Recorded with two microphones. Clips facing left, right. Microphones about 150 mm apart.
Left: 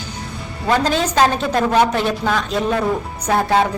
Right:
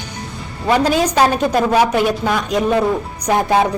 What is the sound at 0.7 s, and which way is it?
Speech, 10° right (ahead or behind).